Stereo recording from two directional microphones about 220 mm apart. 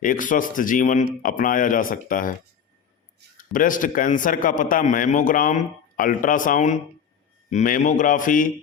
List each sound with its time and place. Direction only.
0.0 s a man's voice: 40° left (ahead or behind)
3.3 s a man's voice: 40° left (ahead or behind)